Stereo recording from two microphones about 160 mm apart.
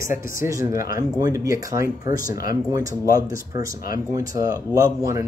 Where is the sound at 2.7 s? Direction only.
20° right (ahead or behind).